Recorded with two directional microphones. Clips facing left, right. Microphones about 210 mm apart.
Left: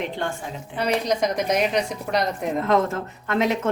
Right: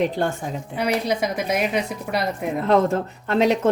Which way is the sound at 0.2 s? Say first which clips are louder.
Right 5 dB; 35° right (ahead or behind).